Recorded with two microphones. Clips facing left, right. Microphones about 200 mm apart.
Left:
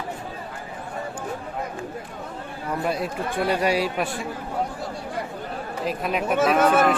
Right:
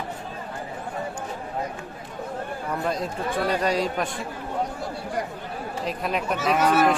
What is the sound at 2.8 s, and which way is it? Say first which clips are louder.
Speech: left 2 dB; 10° left (ahead or behind).